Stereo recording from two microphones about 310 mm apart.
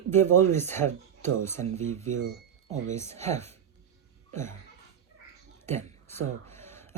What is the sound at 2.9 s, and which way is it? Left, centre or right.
Speech, centre.